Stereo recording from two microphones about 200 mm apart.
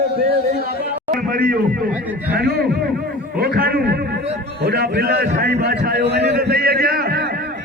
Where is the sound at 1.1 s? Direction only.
45° right (ahead or behind).